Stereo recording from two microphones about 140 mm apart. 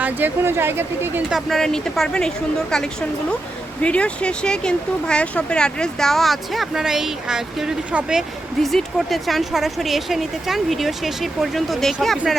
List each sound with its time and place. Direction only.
0.0 s speech: 15° right (ahead or behind)
1.3 s speech: centre (ahead or behind)